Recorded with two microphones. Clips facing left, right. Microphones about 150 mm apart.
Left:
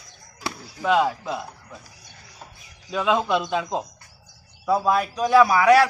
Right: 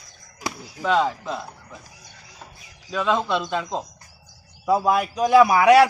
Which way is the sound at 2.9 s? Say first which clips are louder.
Left 1 dB; 10° left (ahead or behind).